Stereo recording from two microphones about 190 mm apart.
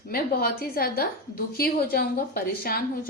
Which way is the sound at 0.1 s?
55° left (ahead or behind).